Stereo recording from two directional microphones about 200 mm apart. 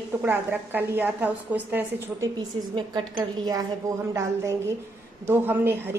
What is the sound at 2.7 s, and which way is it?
A woman's voice, 20° right (ahead or behind).